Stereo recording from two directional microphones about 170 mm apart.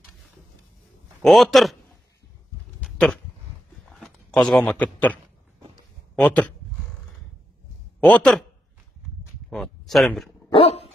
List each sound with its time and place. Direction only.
1.2 s a man's voice: centre (ahead or behind)
2.8 s a sound: 5° left (ahead or behind)
3.9 s speech: 5° left (ahead or behind)
8.0 s a man's voice: 5° left (ahead or behind)
9.5 s speech: centre (ahead or behind)
10.5 s dog: 35° left (ahead or behind)